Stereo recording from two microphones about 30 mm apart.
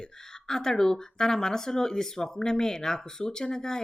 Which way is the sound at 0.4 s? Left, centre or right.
Centre.